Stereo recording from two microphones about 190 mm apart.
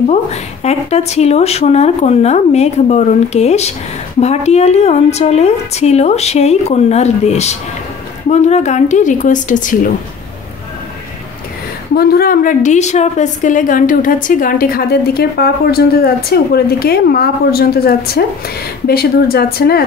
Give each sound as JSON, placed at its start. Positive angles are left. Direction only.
{"t": 0.1, "sound": "speech", "side_deg": 35}
{"t": 12.0, "sound": "a woman's voice", "side_deg": 55}